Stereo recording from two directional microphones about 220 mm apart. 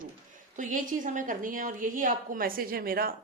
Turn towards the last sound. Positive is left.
turn(degrees=-40)  # may be behind; listen again after turning